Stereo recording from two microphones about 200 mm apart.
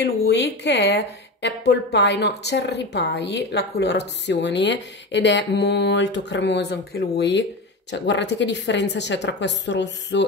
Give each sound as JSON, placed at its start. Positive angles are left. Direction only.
{"t": 0.0, "sound": "a woman's voice", "side_deg": 60}